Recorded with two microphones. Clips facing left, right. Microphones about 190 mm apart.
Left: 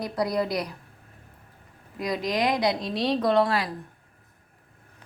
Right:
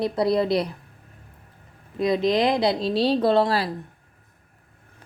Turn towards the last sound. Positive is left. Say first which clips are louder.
# right 3 dB
turn(degrees=-30)  # may be behind; listen again after turning